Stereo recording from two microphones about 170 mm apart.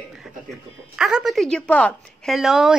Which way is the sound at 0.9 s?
5° right (ahead or behind).